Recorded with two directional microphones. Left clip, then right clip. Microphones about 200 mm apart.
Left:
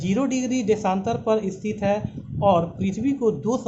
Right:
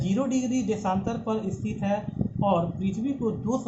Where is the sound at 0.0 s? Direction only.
50° left (ahead or behind).